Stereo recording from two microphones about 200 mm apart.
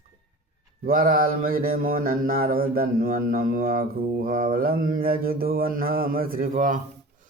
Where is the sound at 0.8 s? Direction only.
45° right (ahead or behind).